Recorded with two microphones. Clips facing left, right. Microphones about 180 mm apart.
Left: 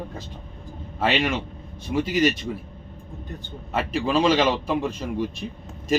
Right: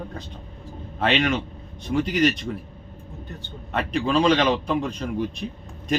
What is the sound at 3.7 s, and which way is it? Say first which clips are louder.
Mantra: even; 5° left (ahead or behind).